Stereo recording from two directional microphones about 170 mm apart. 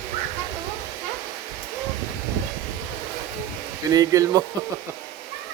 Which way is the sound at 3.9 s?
20° right (ahead or behind).